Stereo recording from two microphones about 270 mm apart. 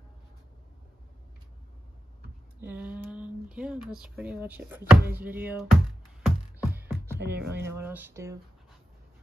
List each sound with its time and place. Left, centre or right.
2.6 s a sound: centre
3.9 s speech: centre
6.2 s music: centre
7.2 s speech: right
7.6 s speech: centre